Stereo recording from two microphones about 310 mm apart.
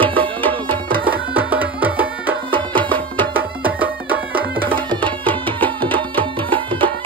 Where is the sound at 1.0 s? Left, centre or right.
Centre.